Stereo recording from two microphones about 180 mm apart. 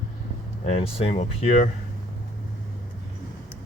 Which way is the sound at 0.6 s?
40° left (ahead or behind).